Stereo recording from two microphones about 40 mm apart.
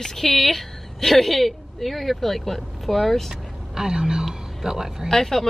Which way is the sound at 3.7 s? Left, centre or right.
Centre.